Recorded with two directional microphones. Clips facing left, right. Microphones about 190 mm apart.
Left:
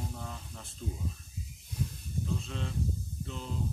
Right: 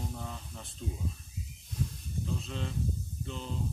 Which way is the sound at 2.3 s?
Centre (ahead or behind).